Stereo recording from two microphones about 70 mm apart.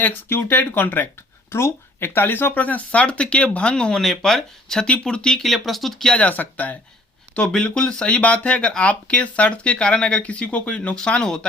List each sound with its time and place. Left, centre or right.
0.0 s speech: left
1.5 s speech: left; by 6.1 s centre
6.1 s speech: left
7.3 s speech: centre